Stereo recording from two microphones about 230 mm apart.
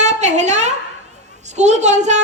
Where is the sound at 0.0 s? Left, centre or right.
Right.